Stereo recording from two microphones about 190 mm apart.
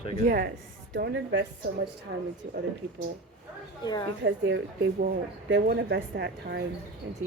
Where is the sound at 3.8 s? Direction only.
20° left (ahead or behind).